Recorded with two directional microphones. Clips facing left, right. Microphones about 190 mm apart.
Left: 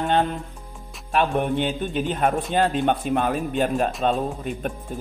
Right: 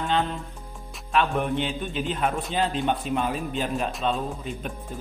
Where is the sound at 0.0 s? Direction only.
55° left (ahead or behind).